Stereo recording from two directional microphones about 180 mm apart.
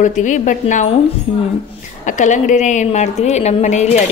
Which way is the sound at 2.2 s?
45° left (ahead or behind).